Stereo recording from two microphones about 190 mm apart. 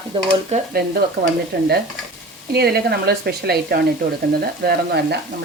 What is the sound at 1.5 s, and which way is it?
Speech, 65° right (ahead or behind).